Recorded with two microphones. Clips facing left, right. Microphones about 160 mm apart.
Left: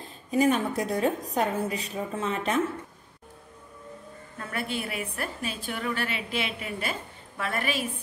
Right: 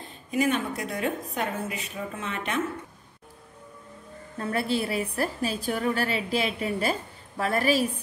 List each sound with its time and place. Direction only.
0.3 s a woman's voice: 35° left (ahead or behind)
4.4 s a woman's voice: 30° right (ahead or behind)